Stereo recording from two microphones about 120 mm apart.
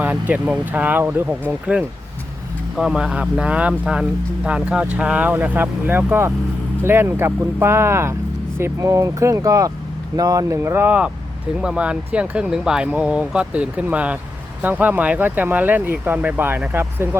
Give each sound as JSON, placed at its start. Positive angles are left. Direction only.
{"t": 0.0, "sound": "speech", "side_deg": -15}